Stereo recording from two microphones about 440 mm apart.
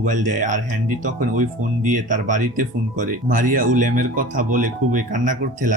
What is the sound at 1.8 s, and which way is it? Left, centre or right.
Speech, centre.